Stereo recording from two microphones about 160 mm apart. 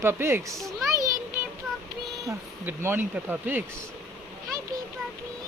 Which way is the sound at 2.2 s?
15° right (ahead or behind).